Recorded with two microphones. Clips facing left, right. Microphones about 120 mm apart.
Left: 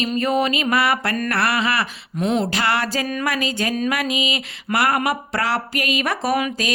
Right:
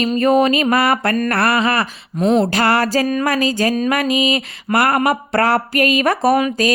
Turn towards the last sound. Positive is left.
turn(degrees=-40)  # may be behind; listen again after turning